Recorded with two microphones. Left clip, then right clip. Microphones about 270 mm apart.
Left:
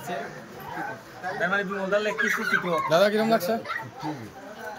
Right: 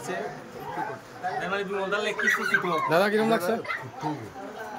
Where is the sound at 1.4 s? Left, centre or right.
Centre.